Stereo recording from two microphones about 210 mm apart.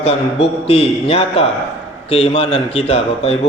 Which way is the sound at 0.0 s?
30° left (ahead or behind).